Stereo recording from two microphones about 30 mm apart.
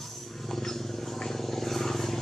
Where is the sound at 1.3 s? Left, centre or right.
Centre.